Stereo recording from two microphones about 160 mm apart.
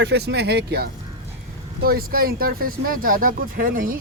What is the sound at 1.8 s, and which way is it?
Speech, 70° right (ahead or behind).